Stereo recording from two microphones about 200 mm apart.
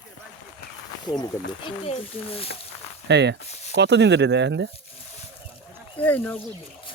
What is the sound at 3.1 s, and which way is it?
Speech, 60° right (ahead or behind).